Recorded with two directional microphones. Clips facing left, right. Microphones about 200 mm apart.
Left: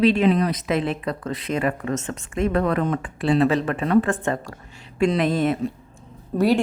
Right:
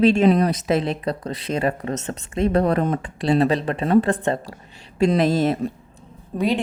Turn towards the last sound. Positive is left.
turn(degrees=-5)  # may be behind; listen again after turning